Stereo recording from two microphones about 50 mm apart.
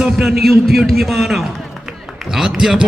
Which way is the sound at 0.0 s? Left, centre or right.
Centre.